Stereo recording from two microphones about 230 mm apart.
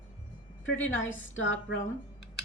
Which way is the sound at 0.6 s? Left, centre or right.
Left.